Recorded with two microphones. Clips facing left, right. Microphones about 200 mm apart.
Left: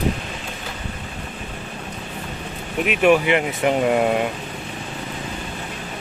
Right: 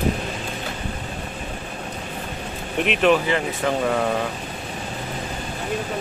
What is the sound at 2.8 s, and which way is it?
Speech, 15° left (ahead or behind).